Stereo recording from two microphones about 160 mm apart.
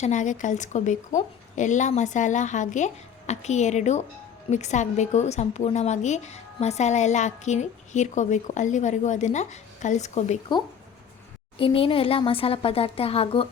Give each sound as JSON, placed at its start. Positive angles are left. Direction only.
{"t": 0.0, "sound": "a woman's voice", "side_deg": 50}
{"t": 11.5, "sound": "speech", "side_deg": 35}